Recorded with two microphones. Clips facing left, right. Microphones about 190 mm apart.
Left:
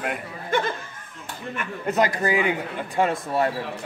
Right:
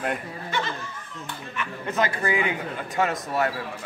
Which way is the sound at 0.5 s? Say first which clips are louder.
Left 6 dB; 50° left (ahead or behind).